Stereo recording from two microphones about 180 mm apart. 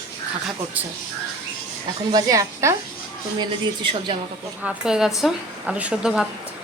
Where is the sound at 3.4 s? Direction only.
25° right (ahead or behind).